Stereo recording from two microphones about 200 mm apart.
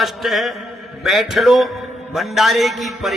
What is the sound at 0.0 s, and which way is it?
A man's voice, centre (ahead or behind).